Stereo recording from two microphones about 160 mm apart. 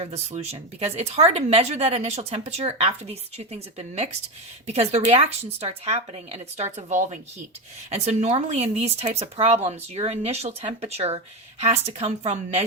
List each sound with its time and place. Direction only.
0.0 s a woman's voice: 40° right (ahead or behind)